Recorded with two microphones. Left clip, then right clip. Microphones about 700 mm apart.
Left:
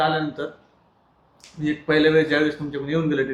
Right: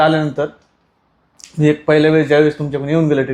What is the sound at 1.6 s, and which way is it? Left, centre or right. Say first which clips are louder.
Speech: right 7 dB; right.